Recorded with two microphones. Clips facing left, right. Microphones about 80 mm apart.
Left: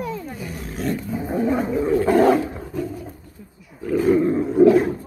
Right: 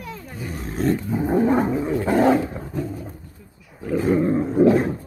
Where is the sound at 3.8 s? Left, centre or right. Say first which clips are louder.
Left 2 dB; centre.